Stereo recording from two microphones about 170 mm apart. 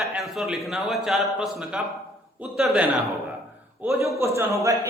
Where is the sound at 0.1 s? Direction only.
Centre (ahead or behind).